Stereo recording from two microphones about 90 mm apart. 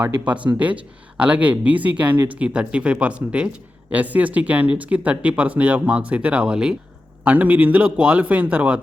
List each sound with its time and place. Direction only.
0.0 s speech: 15° right (ahead or behind)